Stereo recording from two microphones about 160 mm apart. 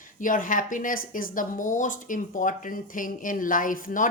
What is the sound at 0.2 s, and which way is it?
Speech, 55° left (ahead or behind).